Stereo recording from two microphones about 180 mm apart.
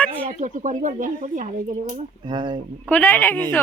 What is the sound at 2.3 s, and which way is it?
Speech, 25° right (ahead or behind).